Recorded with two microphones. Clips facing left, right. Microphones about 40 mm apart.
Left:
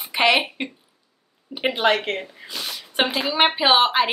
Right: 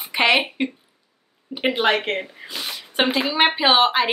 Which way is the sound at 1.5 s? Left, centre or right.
Right.